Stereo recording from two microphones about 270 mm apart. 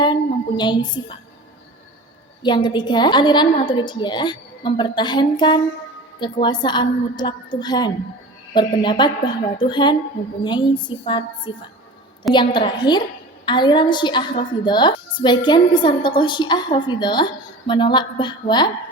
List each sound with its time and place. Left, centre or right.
0.0 s a sound: centre
2.4 s a woman's voice: centre
12.5 s a woman's voice: centre